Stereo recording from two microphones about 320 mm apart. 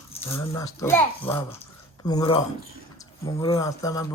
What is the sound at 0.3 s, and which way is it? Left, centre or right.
Speech, centre.